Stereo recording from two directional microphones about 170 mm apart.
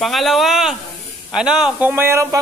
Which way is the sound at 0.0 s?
Centre (ahead or behind).